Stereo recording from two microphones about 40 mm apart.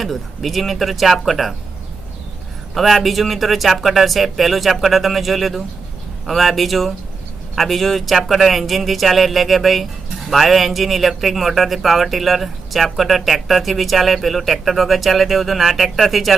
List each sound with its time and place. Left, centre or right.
0.0 s speech: centre
2.7 s speech: centre